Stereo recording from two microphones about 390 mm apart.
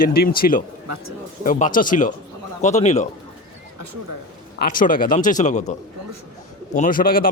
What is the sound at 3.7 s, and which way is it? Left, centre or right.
Speech, right.